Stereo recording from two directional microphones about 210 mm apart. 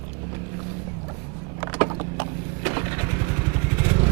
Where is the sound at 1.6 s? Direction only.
20° right (ahead or behind).